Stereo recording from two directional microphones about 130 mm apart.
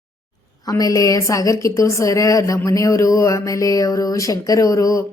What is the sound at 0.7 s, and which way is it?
Speech, 25° left (ahead or behind).